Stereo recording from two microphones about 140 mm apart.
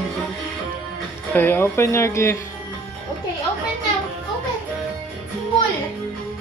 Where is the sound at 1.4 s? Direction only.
15° left (ahead or behind).